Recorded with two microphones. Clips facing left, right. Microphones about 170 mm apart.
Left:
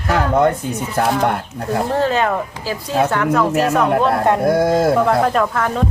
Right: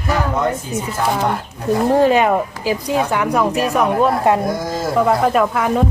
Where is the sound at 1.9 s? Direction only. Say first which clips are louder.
Right 5 dB; 15° right (ahead or behind).